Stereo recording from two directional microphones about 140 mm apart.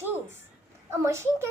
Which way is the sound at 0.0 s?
15° right (ahead or behind).